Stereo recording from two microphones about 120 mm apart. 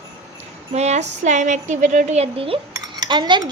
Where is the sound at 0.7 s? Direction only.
70° right (ahead or behind); by 2.6 s 50° right (ahead or behind).